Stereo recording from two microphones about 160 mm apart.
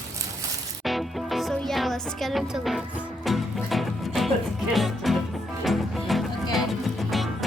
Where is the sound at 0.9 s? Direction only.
Centre (ahead or behind).